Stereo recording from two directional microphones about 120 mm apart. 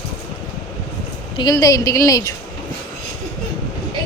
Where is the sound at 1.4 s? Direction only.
30° left (ahead or behind).